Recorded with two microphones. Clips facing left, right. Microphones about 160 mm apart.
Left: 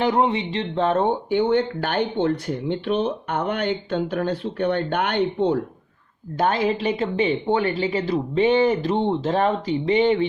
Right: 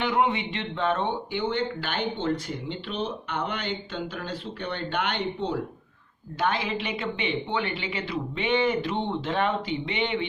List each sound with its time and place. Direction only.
0.0 s speech: 35° left (ahead or behind); by 5.5 s 55° left (ahead or behind)
6.3 s a woman's voice: 40° left (ahead or behind)